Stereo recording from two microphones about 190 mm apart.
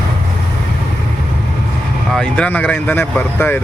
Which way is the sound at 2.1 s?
5° left (ahead or behind).